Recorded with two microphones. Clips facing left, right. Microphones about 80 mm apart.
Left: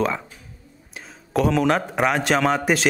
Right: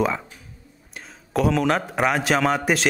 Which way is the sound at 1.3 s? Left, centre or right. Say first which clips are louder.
Left 1 dB; centre.